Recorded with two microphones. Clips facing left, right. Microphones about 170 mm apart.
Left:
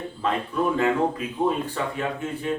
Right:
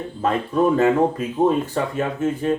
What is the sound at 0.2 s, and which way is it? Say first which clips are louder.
Speech: right 6 dB; 45° right (ahead or behind).